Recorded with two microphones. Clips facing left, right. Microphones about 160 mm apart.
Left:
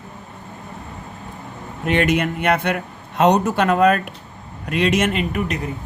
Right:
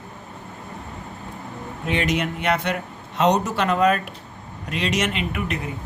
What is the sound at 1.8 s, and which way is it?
Speech, 60° left (ahead or behind).